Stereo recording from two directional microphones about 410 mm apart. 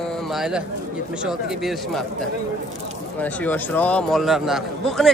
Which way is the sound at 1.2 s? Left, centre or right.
Centre.